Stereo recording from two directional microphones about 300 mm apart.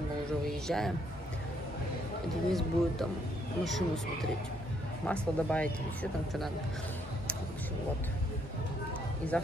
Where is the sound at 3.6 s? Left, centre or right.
Centre.